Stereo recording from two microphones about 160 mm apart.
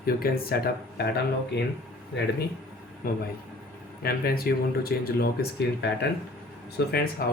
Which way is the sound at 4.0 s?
70° left (ahead or behind).